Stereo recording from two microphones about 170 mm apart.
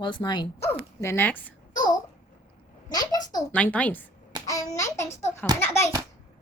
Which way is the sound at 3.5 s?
10° left (ahead or behind).